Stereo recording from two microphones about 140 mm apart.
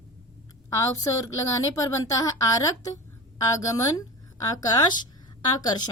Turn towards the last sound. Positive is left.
turn(degrees=30)  # may be behind; listen again after turning